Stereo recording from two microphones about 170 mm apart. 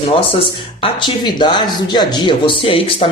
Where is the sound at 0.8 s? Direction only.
30° left (ahead or behind).